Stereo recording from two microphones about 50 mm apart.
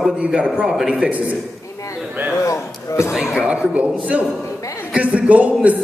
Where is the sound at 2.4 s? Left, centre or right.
Left.